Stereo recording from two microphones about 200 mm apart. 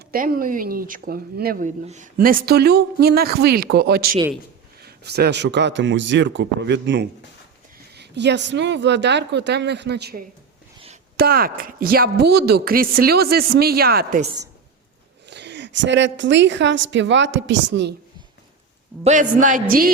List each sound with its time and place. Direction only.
0.1 s a woman's voice: 45° right (ahead or behind)
11.2 s speech: 50° right (ahead or behind)
15.3 s a woman's voice: 60° right (ahead or behind)
19.0 s speech: 40° right (ahead or behind)